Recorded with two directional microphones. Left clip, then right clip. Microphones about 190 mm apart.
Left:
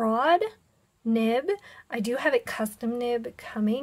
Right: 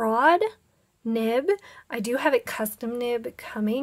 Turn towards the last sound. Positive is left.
turn(degrees=-15)  # may be behind; listen again after turning